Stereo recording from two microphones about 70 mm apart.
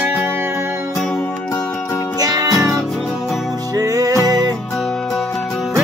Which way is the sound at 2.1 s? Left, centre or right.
Right.